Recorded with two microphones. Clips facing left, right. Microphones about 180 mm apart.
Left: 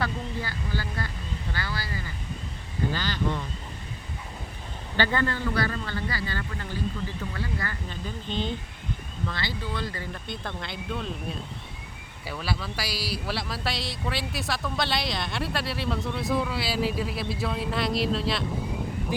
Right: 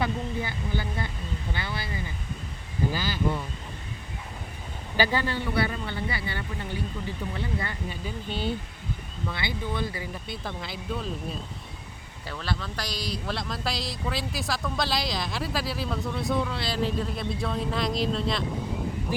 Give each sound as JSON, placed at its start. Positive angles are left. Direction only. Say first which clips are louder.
{"t": 0.0, "sound": "speech", "louder": "right 2 dB", "side_deg": -20}
{"t": 2.9, "sound": "speech", "louder": "even", "side_deg": -10}
{"t": 4.9, "sound": "speech", "louder": "even", "side_deg": -10}
{"t": 7.9, "sound": "speech", "louder": "right 1 dB", "side_deg": -10}
{"t": 12.3, "sound": "speech", "louder": "left 1 dB", "side_deg": 10}